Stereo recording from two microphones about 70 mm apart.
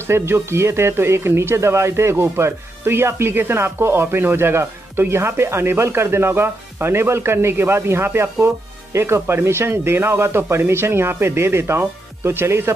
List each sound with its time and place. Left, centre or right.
0.0 s speech: right